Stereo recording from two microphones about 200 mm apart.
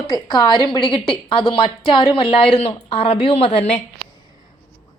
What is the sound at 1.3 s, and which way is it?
A woman's voice, 25° left (ahead or behind).